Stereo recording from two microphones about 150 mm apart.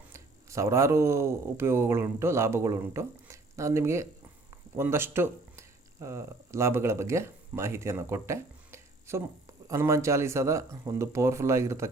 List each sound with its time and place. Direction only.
0.1 s speech: 20° right (ahead or behind)